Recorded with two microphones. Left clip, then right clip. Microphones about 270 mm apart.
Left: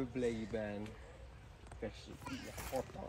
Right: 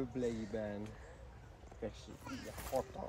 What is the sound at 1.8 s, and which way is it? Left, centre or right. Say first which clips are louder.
Speech: even; centre.